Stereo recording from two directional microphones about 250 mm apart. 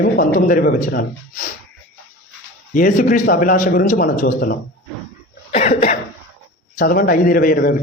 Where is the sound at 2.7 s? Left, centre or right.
Left.